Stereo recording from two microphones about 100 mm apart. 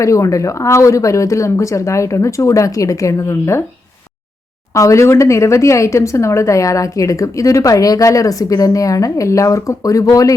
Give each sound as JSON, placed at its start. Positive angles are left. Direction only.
{"t": 0.0, "sound": "speech", "side_deg": 30}
{"t": 4.7, "sound": "speech", "side_deg": 30}